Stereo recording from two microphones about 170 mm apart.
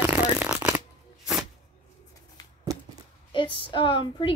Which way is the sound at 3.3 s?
30° left (ahead or behind).